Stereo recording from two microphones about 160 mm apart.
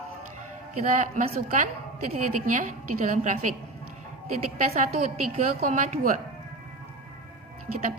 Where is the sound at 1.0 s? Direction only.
50° right (ahead or behind).